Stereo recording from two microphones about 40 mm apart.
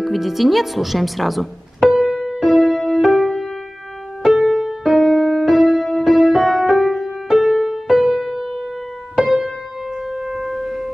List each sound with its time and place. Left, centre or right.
0.0 s speech: centre
2.2 s music: centre
2.5 s music: centre
10.2 s wind instrument: centre